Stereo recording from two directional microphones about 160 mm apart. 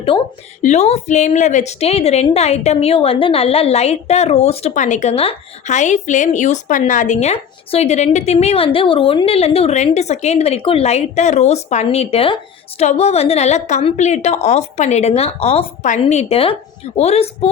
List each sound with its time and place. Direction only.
0.1 s a woman's voice: 30° left (ahead or behind)
0.6 s a woman's voice: 45° left (ahead or behind)